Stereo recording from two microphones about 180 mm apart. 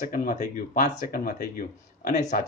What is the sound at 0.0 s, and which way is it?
Speech, 50° left (ahead or behind).